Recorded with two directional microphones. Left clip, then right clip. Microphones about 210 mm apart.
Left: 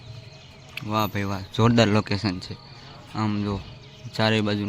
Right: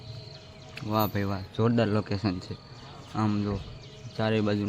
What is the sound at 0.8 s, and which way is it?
Speech, centre (ahead or behind).